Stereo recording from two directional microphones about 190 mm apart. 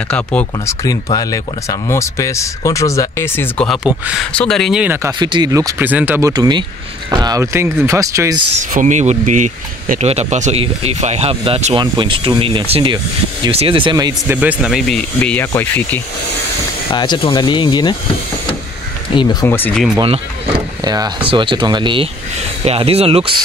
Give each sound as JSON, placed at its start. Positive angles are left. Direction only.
{"t": 0.1, "sound": "speech", "side_deg": 5}
{"t": 1.1, "sound": "speech", "side_deg": 20}
{"t": 6.3, "sound": "speech", "side_deg": -20}
{"t": 8.5, "sound": "speech", "side_deg": -40}
{"t": 14.2, "sound": "speech", "side_deg": -10}
{"t": 16.9, "sound": "speech", "side_deg": 25}
{"t": 19.4, "sound": "speech", "side_deg": 10}
{"t": 20.8, "sound": "speech", "side_deg": -20}